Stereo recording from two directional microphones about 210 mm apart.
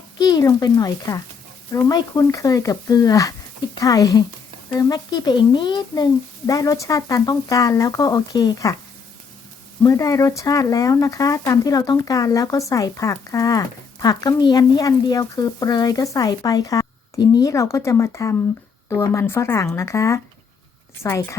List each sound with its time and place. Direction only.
0.2 s speech: 20° left (ahead or behind)
9.8 s speech: 15° left (ahead or behind)